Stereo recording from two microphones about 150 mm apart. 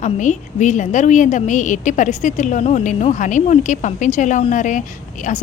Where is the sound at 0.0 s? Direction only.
55° left (ahead or behind).